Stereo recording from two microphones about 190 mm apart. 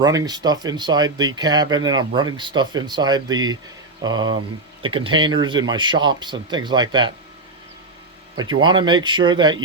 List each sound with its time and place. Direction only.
0.0 s speech: 20° right (ahead or behind)
8.4 s speech: 25° right (ahead or behind)